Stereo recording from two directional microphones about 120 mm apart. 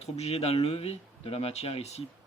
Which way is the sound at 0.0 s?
60° left (ahead or behind).